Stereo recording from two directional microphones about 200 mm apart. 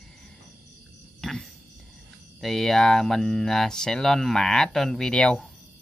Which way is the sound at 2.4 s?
Centre (ahead or behind).